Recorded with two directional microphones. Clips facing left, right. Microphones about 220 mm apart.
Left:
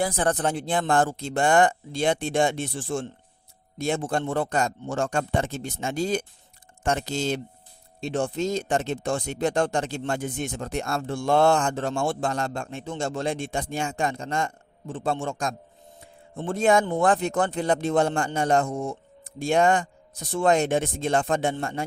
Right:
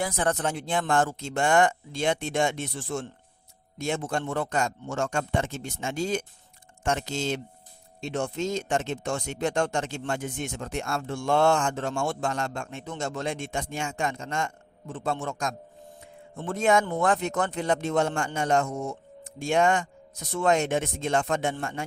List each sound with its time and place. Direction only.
0.0 s speech: 35° left (ahead or behind)